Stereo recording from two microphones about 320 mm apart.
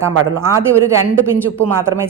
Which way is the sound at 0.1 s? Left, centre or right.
Right.